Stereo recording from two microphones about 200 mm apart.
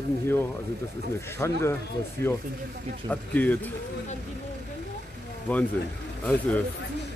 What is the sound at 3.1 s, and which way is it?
Speech, 10° left (ahead or behind).